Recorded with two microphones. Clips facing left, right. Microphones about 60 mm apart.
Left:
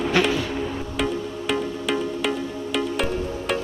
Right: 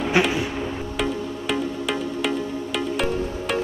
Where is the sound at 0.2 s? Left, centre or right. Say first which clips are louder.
Right 1 dB; centre.